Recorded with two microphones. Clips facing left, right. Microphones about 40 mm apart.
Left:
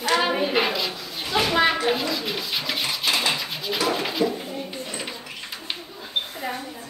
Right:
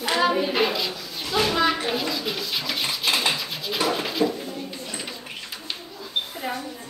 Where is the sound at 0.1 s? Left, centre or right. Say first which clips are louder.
Even; centre.